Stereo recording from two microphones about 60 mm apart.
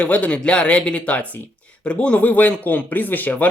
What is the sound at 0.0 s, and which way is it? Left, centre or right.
Speech, left.